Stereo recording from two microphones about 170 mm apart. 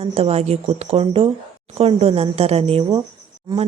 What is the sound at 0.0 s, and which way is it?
Speech, 35° right (ahead or behind).